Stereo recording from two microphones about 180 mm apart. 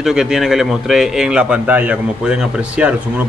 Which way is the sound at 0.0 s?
5° right (ahead or behind).